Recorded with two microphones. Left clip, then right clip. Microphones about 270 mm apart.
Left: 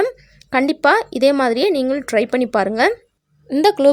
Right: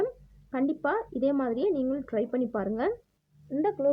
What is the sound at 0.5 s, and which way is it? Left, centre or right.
A woman's voice, left.